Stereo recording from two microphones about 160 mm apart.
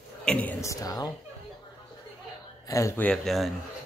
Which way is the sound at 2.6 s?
20° left (ahead or behind).